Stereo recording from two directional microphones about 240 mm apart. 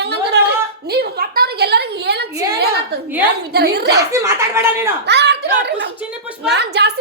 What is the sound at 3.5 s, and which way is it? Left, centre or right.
Speech, right.